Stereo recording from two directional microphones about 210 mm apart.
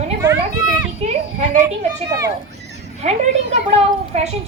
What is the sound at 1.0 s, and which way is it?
Speech, 30° right (ahead or behind).